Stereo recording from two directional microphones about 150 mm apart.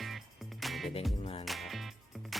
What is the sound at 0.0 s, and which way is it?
Music, centre (ahead or behind).